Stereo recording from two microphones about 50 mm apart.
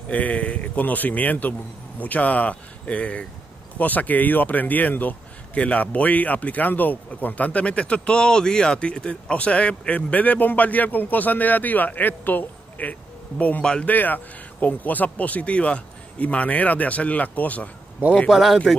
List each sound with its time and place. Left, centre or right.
0.1 s speech: left
13.6 s speech: centre
13.8 s speech: left
18.3 s speech: centre